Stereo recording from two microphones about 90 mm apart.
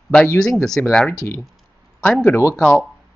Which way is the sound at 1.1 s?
35° left (ahead or behind).